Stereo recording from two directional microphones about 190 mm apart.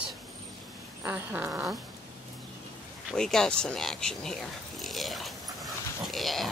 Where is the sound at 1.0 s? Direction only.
10° right (ahead or behind).